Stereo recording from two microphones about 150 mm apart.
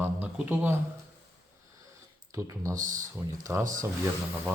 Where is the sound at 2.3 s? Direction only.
20° right (ahead or behind).